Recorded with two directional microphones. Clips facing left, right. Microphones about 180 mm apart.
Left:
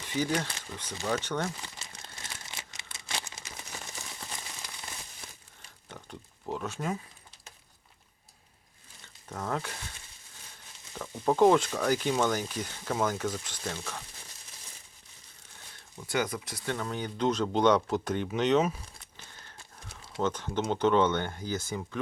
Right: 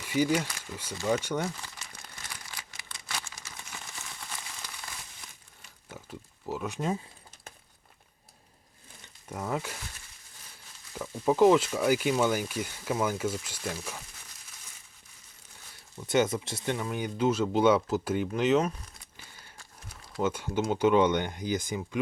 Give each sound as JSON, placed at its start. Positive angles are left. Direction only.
{"t": 0.0, "sound": "speech", "side_deg": -10}
{"t": 2.5, "sound": "crumpling", "side_deg": 25}
{"t": 5.9, "sound": "pig", "side_deg": -5}
{"t": 6.5, "sound": "a sound", "side_deg": -5}
{"t": 6.7, "sound": "speech", "side_deg": -25}
{"t": 9.3, "sound": "speech", "side_deg": -10}
{"t": 10.9, "sound": "speech", "side_deg": -5}
{"t": 16.0, "sound": "speech", "side_deg": -25}
{"t": 16.7, "sound": "speech", "side_deg": -10}
{"t": 19.1, "sound": "a sound", "side_deg": -10}
{"t": 19.9, "sound": "a sound", "side_deg": 25}
{"t": 20.2, "sound": "speech", "side_deg": -10}